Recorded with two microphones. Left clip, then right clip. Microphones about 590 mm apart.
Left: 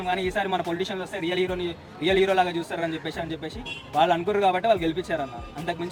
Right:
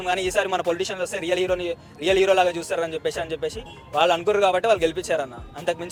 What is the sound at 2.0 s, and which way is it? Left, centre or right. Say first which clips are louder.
A man's voice: right 3 dB; right.